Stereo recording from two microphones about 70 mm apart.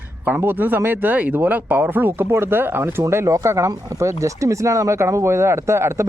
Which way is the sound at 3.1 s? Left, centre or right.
Right.